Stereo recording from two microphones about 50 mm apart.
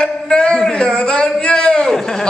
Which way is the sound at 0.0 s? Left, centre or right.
Centre.